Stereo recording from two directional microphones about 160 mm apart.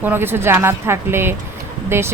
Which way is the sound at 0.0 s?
15° right (ahead or behind).